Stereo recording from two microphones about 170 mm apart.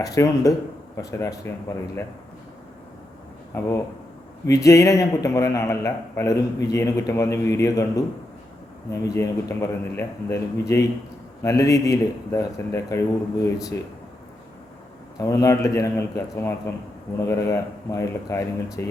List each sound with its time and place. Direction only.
0.0 s a man's voice: 20° left (ahead or behind)
3.5 s a man's voice: 15° left (ahead or behind)
15.2 s a man's voice: 20° left (ahead or behind)